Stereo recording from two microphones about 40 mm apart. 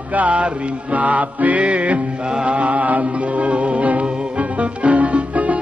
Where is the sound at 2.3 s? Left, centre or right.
Right.